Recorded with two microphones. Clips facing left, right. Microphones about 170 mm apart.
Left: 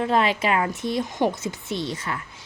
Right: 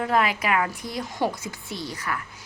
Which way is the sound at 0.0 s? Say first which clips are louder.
Left 2 dB; 25° left (ahead or behind).